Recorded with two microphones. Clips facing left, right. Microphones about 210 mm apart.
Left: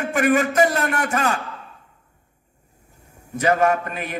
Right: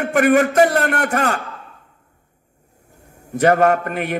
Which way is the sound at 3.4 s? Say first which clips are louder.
Right 4 dB; 60° right (ahead or behind).